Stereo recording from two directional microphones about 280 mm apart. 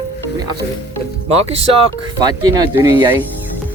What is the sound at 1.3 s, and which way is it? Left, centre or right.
Speech, right.